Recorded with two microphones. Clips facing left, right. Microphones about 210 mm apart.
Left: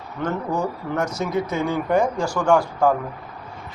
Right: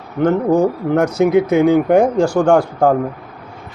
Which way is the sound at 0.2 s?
60° right (ahead or behind).